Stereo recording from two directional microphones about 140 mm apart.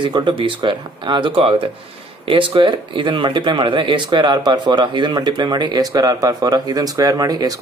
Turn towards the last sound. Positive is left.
turn(degrees=-25)  # may be behind; listen again after turning